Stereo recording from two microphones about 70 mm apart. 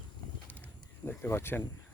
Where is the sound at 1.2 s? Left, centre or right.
Left.